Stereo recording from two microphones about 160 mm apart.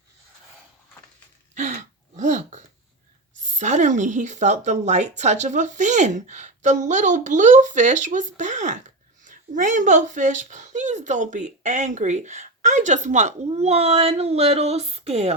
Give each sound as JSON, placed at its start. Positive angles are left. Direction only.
{"t": 1.5, "sound": "throat clearing", "side_deg": -50}
{"t": 3.5, "sound": "a woman's voice", "side_deg": -50}